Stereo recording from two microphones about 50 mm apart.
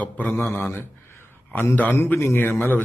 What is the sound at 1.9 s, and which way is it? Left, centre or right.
Speech, left.